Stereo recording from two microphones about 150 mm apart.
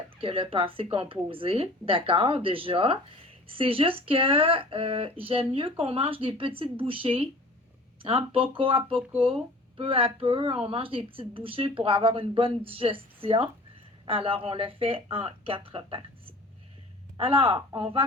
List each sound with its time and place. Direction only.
0.2 s speech: 40° right (ahead or behind)